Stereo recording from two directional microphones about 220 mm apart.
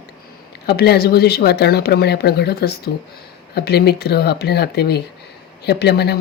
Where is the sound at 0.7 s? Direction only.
45° left (ahead or behind).